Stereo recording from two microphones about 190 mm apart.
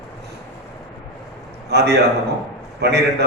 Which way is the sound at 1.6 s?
60° right (ahead or behind).